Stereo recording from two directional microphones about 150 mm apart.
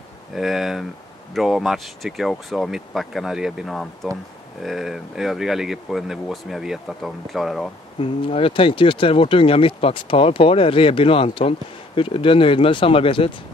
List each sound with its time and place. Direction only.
0.3 s speech: centre (ahead or behind)
8.0 s speech: 40° left (ahead or behind)